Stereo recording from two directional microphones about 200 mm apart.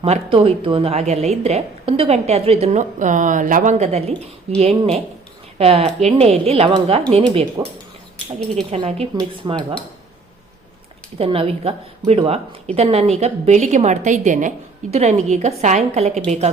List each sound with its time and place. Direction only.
0.0 s a woman's voice: 30° right (ahead or behind)
7.6 s speech: 20° right (ahead or behind)
8.7 s speech: 30° right (ahead or behind)
11.2 s a woman's voice: 30° right (ahead or behind)